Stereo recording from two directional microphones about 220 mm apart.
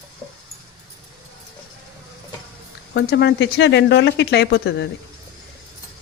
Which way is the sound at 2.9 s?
50° left (ahead or behind).